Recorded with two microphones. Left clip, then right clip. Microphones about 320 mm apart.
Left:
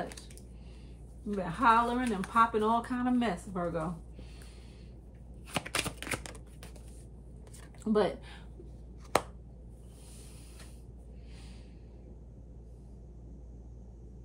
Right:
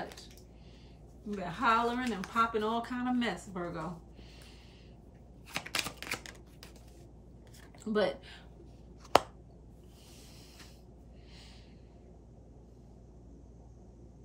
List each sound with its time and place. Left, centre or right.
1.3 s speech: centre
5.5 s shuffling cards: centre
7.8 s speech: centre
9.1 s chopping: centre